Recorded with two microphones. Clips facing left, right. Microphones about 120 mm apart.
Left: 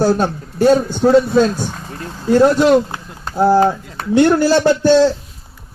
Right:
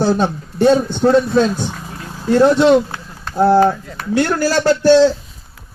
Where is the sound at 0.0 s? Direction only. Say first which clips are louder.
Left 1 dB; 5° left (ahead or behind).